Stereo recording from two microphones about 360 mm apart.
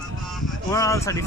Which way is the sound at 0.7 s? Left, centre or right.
Centre.